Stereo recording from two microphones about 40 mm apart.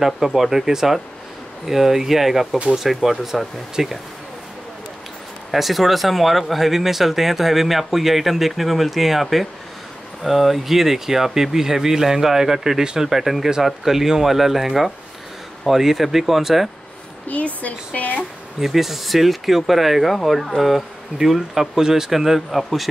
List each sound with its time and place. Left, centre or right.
0.0 s speech: centre
5.5 s speech: centre
17.6 s speech: left
18.6 s speech: centre